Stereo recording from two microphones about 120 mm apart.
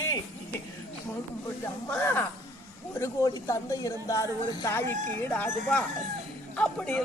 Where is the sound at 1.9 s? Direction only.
15° left (ahead or behind).